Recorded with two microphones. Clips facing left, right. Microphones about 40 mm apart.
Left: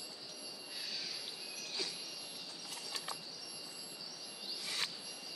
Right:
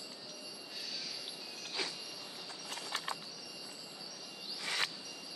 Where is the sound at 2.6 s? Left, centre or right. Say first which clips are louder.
Right 5 dB; right.